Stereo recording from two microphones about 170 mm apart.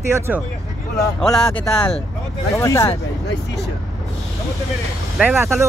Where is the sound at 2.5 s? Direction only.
15° left (ahead or behind).